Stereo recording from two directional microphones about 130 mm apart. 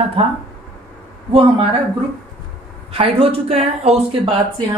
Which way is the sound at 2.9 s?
50° right (ahead or behind).